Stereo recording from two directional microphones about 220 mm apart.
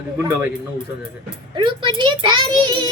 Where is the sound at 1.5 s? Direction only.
20° right (ahead or behind).